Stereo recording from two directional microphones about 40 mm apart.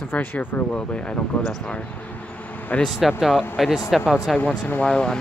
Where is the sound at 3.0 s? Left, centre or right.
Centre.